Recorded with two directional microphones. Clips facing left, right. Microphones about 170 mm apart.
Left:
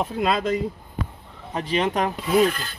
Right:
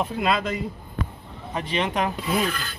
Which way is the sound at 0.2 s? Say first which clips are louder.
Left 4 dB; 40° left (ahead or behind).